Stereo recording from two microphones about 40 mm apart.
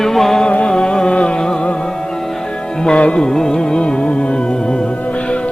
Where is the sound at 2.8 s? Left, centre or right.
Left.